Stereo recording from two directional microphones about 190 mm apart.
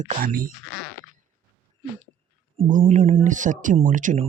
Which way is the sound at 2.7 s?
40° right (ahead or behind).